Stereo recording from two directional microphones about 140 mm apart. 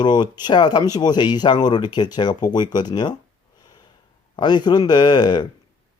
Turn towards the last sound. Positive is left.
turn(degrees=30)  # may be behind; listen again after turning